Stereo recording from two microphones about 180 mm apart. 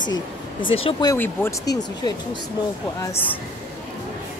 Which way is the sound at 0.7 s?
30° left (ahead or behind).